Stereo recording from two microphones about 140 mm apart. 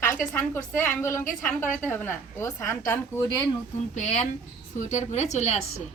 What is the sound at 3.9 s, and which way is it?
A woman's voice, 60° left (ahead or behind).